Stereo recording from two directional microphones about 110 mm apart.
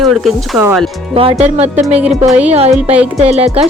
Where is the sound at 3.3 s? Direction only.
75° right (ahead or behind).